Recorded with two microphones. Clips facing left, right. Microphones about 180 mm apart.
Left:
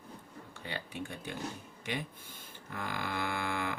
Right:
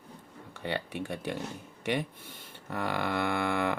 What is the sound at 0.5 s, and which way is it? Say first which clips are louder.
Speech: right 8 dB; 65° right (ahead or behind).